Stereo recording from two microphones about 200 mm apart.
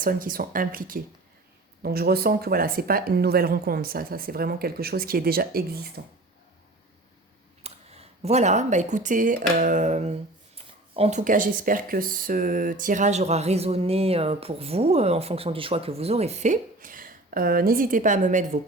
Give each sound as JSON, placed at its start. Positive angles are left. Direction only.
{"t": 0.0, "sound": "speech", "side_deg": -45}
{"t": 7.6, "sound": "speech", "side_deg": -30}